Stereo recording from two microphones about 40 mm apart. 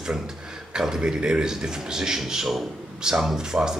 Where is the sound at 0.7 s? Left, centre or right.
Centre.